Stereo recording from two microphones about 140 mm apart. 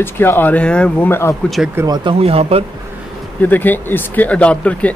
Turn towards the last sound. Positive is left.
turn(degrees=10)  # may be behind; listen again after turning